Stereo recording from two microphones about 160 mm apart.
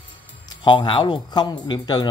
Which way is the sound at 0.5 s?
30° left (ahead or behind).